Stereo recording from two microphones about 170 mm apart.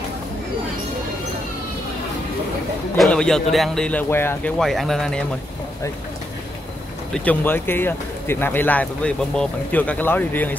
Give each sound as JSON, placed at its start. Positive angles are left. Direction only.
{"t": 3.0, "sound": "speech", "side_deg": 5}
{"t": 4.6, "sound": "speech", "side_deg": 0}
{"t": 7.2, "sound": "speech", "side_deg": 10}